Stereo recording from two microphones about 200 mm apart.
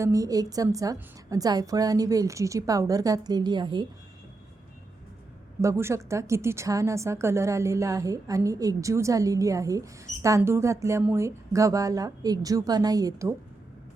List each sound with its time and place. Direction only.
0.0 s a woman's voice: 15° right (ahead or behind)
5.6 s a woman's voice: 15° right (ahead or behind)